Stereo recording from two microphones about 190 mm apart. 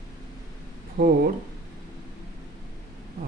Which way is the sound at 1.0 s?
60° right (ahead or behind).